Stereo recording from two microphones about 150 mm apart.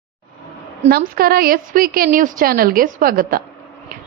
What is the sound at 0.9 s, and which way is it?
A woman's voice, 90° right.